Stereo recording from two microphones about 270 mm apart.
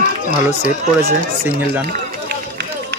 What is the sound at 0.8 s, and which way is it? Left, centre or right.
Speech, right.